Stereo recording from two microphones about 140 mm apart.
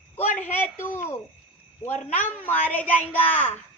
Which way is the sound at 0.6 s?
15° left (ahead or behind).